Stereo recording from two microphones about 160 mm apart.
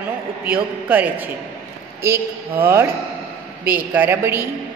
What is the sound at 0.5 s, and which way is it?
A woman's voice, 10° right (ahead or behind).